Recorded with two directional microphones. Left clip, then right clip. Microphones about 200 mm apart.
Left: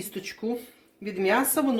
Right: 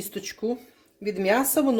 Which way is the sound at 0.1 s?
50° right (ahead or behind).